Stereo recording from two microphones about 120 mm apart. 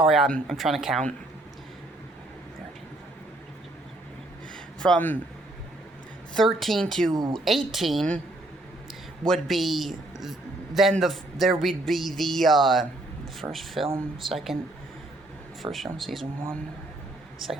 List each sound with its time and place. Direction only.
0.0 s speech: 5° right (ahead or behind)
4.8 s speech: 10° left (ahead or behind)
6.3 s speech: centre (ahead or behind)
7.1 s a woman's voice: 35° right (ahead or behind)
7.3 s speech: centre (ahead or behind)
9.2 s speech: centre (ahead or behind)
15.7 s speech: centre (ahead or behind)
17.4 s speech: centre (ahead or behind)